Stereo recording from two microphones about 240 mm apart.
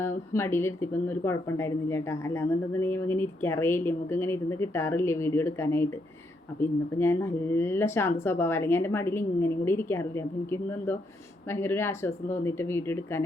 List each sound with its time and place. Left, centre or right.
0.0 s speech: centre